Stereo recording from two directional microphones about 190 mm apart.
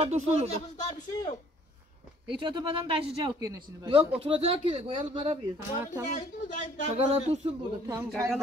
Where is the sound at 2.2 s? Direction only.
25° right (ahead or behind).